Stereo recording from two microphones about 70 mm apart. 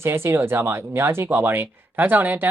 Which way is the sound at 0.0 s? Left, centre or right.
Right.